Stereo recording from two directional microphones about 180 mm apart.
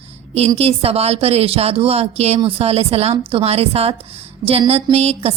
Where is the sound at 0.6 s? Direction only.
35° right (ahead or behind).